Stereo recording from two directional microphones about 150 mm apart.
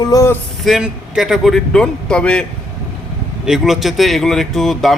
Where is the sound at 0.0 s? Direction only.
20° left (ahead or behind).